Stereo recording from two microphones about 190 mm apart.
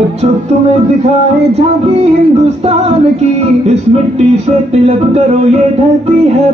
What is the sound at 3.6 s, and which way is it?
Speech, 35° right (ahead or behind).